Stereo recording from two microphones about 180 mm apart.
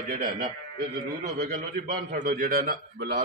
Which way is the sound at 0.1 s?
45° right (ahead or behind).